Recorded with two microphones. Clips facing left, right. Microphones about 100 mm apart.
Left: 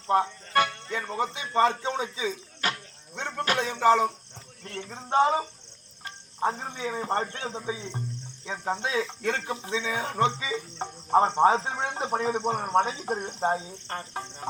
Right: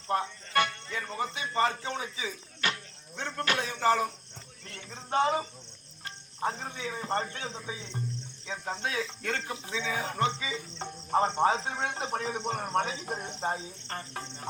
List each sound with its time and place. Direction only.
0.1 s a man's voice: 25° left (ahead or behind)
12.5 s a man's voice: 10° left (ahead or behind)
12.7 s speech: 35° left (ahead or behind)